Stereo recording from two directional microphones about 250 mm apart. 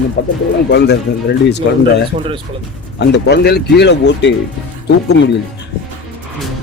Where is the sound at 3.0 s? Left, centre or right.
Left.